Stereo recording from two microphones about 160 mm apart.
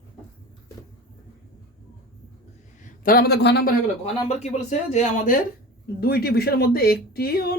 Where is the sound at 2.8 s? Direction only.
65° left (ahead or behind); by 3.7 s 90° left.